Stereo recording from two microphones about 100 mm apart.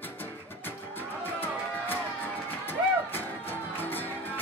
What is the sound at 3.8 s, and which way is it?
Music, 20° left (ahead or behind).